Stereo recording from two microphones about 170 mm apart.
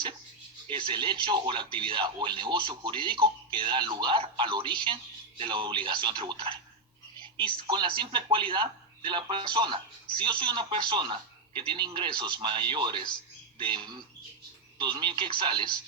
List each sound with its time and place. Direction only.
0.7 s speech: 30° right (ahead or behind)
7.2 s telephone: 30° right (ahead or behind)
7.7 s speech: 25° right (ahead or behind)